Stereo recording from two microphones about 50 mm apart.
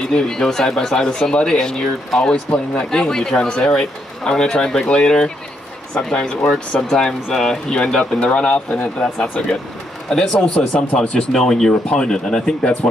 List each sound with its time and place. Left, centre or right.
0.1 s speech: centre
6.7 s speech: centre
10.0 s speech: centre